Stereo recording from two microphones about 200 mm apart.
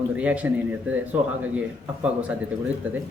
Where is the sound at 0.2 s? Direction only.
5° right (ahead or behind).